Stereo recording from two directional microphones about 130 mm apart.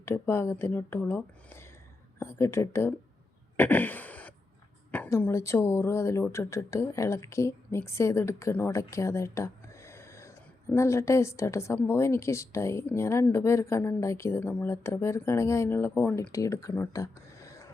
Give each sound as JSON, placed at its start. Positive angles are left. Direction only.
{"t": 0.0, "sound": "a woman's voice", "side_deg": 20}
{"t": 3.6, "sound": "a sound", "side_deg": 15}
{"t": 4.9, "sound": "a woman's voice", "side_deg": 20}